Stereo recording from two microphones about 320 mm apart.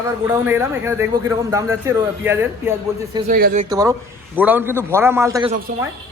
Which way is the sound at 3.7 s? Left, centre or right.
Centre.